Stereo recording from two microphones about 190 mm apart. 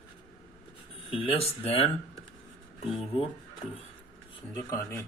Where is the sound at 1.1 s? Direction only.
30° left (ahead or behind).